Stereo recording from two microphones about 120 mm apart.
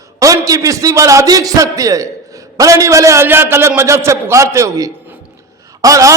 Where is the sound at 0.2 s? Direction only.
30° right (ahead or behind).